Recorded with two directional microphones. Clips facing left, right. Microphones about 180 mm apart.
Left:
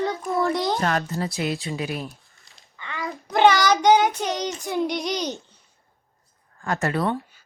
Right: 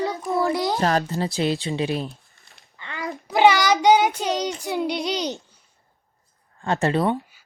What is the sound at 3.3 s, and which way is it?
Child singing, 10° right (ahead or behind).